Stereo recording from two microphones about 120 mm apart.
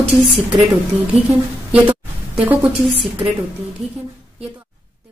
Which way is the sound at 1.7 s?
10° right (ahead or behind).